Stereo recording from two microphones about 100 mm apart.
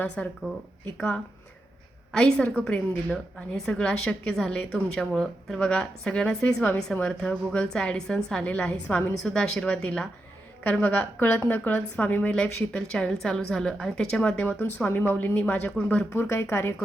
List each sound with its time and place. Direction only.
0.2 s a woman's voice: 10° left (ahead or behind)
2.1 s a woman's voice: 10° left (ahead or behind)